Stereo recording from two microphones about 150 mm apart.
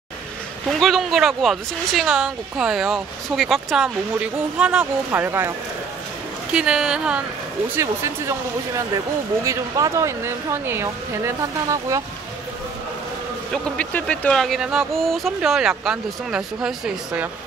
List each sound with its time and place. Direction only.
0.7 s speech: centre (ahead or behind); by 5.5 s 15° right (ahead or behind)
6.5 s speech: 5° right (ahead or behind)
7.7 s speech: 20° right (ahead or behind)
13.5 s speech: 10° left (ahead or behind); by 17.3 s 5° right (ahead or behind)